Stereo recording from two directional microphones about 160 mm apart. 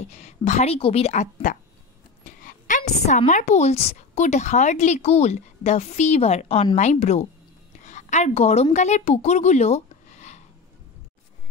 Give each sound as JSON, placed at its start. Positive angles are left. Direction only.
{"t": 0.1, "sound": "a woman's voice", "side_deg": 45}
{"t": 7.8, "sound": "a sound", "side_deg": 50}
{"t": 8.7, "sound": "speech", "side_deg": 45}